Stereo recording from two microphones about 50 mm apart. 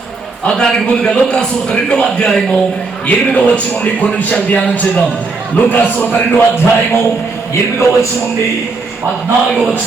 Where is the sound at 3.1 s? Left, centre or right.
Left.